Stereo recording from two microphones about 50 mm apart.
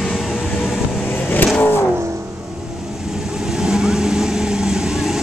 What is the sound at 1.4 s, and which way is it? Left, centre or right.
Vehicle, left.